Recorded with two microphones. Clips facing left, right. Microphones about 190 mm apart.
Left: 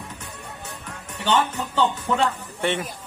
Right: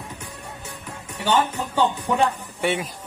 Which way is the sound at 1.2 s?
10° right (ahead or behind).